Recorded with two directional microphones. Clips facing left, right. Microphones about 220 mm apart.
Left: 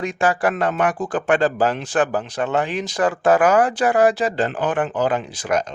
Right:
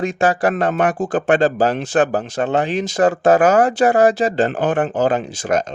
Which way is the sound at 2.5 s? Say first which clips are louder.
Right 3 dB; 30° right (ahead or behind).